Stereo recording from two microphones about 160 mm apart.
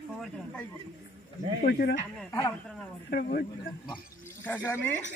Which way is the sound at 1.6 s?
70° left (ahead or behind).